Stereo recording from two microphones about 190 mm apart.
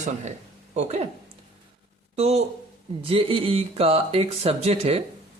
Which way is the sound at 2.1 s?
35° right (ahead or behind).